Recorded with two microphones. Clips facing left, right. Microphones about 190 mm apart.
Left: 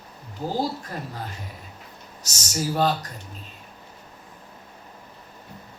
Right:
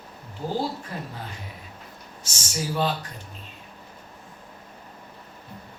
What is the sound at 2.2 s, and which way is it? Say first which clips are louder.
Speech: left 3 dB; 40° left (ahead or behind).